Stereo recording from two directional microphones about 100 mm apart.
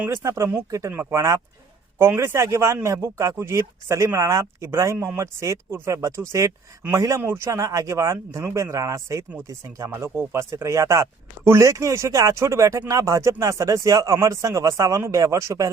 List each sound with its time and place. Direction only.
0.1 s speech: 30° right (ahead or behind)